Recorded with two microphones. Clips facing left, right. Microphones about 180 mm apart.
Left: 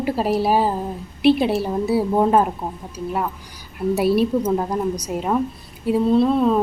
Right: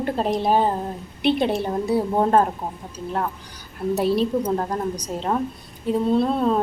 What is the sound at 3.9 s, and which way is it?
A woman's voice, 10° left (ahead or behind).